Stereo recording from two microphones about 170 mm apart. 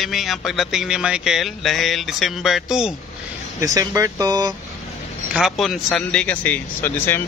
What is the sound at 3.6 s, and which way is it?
Speech, 20° right (ahead or behind).